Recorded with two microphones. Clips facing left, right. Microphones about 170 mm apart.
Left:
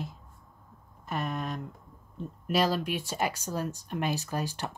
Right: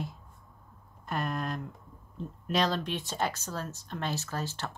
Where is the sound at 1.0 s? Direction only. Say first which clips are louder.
Even; centre (ahead or behind).